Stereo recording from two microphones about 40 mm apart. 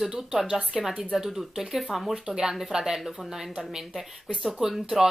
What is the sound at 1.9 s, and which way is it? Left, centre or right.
Speech, centre.